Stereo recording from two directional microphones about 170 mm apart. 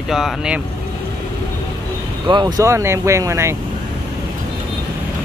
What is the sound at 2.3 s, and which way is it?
Speech, 25° right (ahead or behind).